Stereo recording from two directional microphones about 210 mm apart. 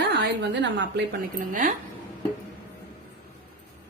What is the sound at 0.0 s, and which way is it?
A woman's voice, 55° right (ahead or behind).